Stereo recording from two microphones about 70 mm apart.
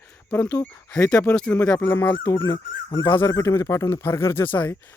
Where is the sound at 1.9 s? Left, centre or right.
Left.